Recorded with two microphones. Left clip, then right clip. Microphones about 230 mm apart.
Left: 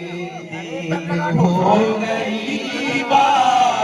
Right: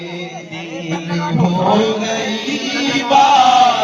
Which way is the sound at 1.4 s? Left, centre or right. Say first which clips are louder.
Right 1 dB; right.